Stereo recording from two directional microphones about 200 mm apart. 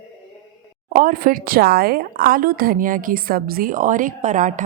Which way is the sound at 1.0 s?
45° right (ahead or behind).